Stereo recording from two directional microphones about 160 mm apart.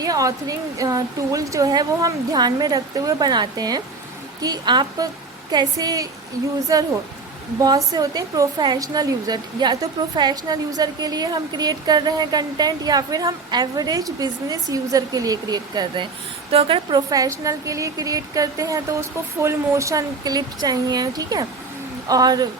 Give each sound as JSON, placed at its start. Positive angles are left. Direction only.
{"t": 0.0, "sound": "a woman's voice", "side_deg": -20}